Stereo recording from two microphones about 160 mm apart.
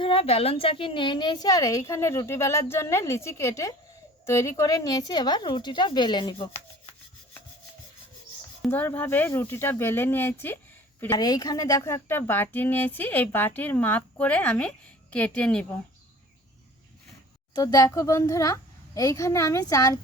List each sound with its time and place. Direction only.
0.0 s a woman's voice: 35° left (ahead or behind)
8.6 s speech: 10° left (ahead or behind)
17.5 s a woman's voice: 25° left (ahead or behind)